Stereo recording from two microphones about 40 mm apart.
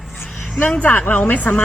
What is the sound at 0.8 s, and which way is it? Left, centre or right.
Speech, left.